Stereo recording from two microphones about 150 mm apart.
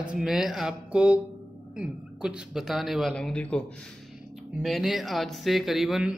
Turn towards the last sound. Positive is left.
turn(degrees=0)  # may be behind; listen again after turning